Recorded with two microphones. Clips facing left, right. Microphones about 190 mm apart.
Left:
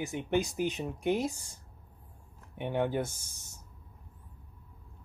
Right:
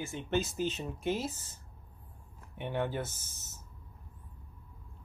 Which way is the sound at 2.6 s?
15° left (ahead or behind).